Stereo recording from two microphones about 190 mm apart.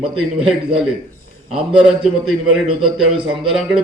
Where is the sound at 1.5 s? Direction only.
5° right (ahead or behind).